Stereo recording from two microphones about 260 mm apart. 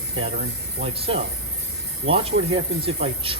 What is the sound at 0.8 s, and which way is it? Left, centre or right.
Speech, right.